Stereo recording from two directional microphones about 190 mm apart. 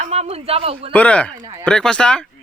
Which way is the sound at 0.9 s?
5° left (ahead or behind).